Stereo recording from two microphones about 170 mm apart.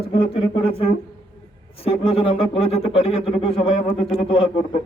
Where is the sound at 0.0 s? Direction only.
30° left (ahead or behind).